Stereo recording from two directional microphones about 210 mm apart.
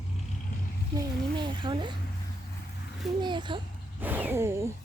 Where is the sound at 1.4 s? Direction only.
20° right (ahead or behind).